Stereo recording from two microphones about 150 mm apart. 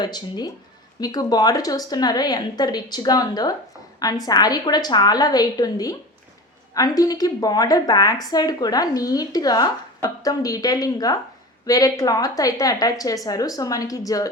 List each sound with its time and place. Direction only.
0.0 s speech: 30° left (ahead or behind)